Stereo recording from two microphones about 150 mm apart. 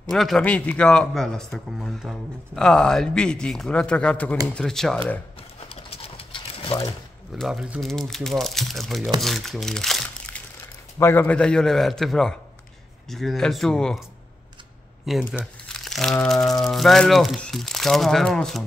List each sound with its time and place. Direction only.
0.1 s speech: centre (ahead or behind)
5.9 s pigeon: 40° left (ahead or behind)
7.3 s speech: centre (ahead or behind)
9.2 s crumpling: centre (ahead or behind)
11.0 s speech: 15° left (ahead or behind)
15.0 s speech: 5° right (ahead or behind)